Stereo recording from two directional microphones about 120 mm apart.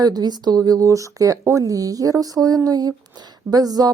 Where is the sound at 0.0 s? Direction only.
35° right (ahead or behind).